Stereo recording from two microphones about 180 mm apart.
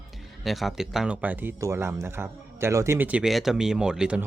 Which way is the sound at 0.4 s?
Centre (ahead or behind).